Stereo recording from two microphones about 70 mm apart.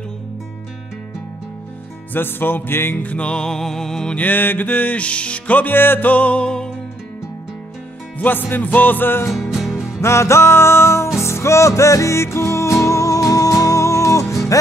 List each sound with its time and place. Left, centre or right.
2.1 s music: left; by 4.2 s centre
4.2 s music: left
8.2 s music: left
9.3 s music: centre
10.0 s music: left